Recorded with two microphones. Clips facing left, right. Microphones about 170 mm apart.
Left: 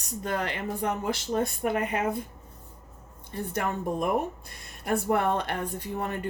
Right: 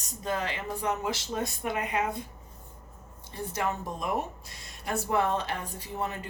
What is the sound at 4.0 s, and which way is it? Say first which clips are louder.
Speech: left 5 dB; 55° left (ahead or behind).